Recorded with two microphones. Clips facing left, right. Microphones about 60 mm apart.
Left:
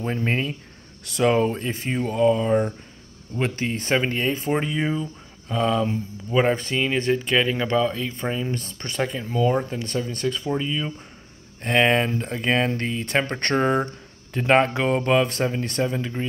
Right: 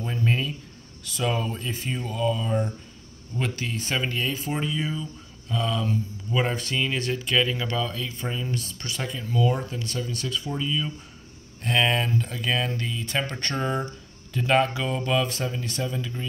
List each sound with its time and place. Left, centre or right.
0.0 s speech: left
1.0 s speech: left
5.5 s speech: left
8.5 s speech: left
9.2 s speech: left
9.5 s speech: left